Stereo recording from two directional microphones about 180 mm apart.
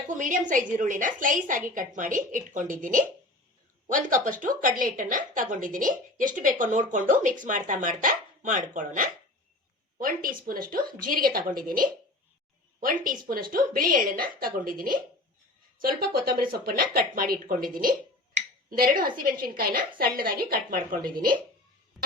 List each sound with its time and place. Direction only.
0.1 s a woman's voice: 45° right (ahead or behind)
18.7 s a woman's voice: 50° right (ahead or behind)